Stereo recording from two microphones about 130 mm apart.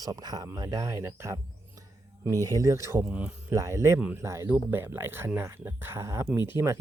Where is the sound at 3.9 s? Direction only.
10° right (ahead or behind).